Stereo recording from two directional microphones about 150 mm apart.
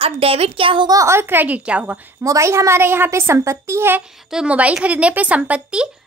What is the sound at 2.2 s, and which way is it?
A woman's voice, 20° right (ahead or behind).